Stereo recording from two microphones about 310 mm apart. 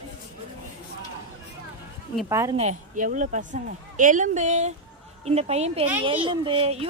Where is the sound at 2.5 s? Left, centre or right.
Right.